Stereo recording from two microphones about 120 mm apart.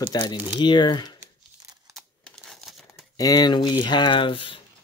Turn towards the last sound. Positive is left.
turn(degrees=45)  # may be behind; listen again after turning